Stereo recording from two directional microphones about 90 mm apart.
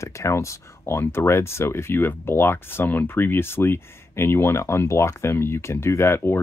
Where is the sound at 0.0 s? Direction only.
35° left (ahead or behind).